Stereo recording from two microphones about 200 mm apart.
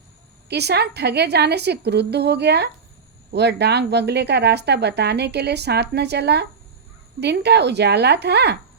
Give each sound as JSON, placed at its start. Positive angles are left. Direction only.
{"t": 0.4, "sound": "speech", "side_deg": -55}